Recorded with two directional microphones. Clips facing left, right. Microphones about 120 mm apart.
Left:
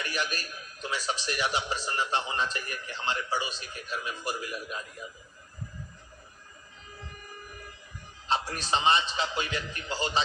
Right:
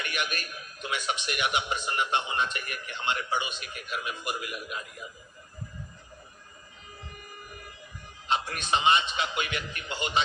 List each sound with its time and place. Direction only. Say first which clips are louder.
0.0 s a man's voice: even; 30° left (ahead or behind)
8.3 s a man's voice: right 1 dB; 35° left (ahead or behind)